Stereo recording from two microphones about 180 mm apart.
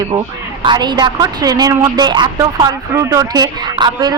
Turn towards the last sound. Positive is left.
turn(degrees=-20)  # may be behind; listen again after turning